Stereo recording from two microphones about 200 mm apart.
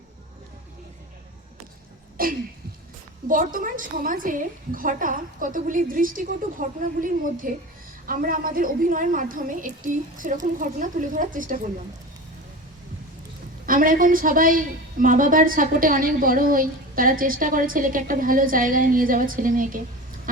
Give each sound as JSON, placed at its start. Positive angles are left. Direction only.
{"t": 2.2, "sound": "a woman's voice", "side_deg": -45}
{"t": 13.7, "sound": "a woman's voice", "side_deg": -45}